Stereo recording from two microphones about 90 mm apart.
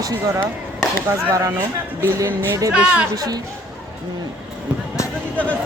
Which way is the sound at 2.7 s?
15° right (ahead or behind).